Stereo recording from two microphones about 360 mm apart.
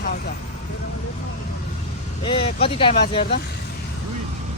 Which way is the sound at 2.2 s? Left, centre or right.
Centre.